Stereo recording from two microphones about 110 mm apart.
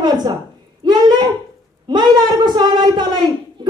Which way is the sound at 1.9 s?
40° right (ahead or behind).